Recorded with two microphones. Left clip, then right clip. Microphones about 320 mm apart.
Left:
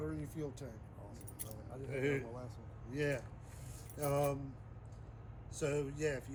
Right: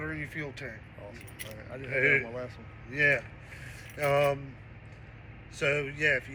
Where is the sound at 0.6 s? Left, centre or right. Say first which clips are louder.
Right 10 dB; centre.